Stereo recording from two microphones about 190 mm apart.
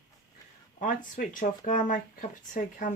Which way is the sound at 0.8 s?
45° left (ahead or behind).